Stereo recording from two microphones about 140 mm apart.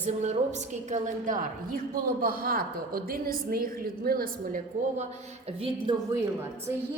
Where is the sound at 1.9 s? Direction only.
90° right.